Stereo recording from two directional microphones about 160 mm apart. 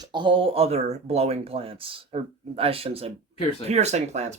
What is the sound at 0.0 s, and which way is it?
Speech, 30° right (ahead or behind).